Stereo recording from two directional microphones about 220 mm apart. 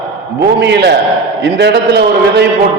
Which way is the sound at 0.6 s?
50° right (ahead or behind).